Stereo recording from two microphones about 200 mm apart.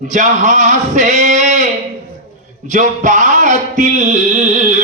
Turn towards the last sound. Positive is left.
turn(degrees=-40)  # may be behind; listen again after turning